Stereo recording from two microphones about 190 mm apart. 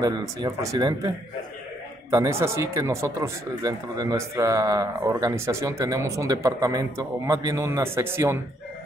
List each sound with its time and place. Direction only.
0.4 s speech: 20° right (ahead or behind)